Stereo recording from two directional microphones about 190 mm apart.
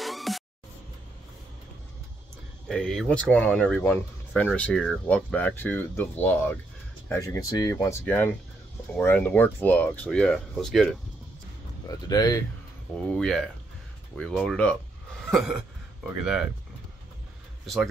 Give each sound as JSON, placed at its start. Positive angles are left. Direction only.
{"t": 0.0, "sound": "music", "side_deg": 0}
{"t": 2.7, "sound": "speech", "side_deg": 5}
{"t": 11.9, "sound": "speech", "side_deg": 20}
{"t": 12.9, "sound": "speech", "side_deg": 5}
{"t": 16.1, "sound": "speech", "side_deg": -5}